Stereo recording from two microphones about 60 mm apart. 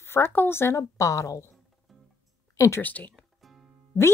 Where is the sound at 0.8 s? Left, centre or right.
Left.